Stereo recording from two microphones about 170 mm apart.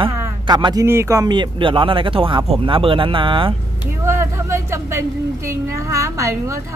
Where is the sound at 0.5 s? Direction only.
25° right (ahead or behind).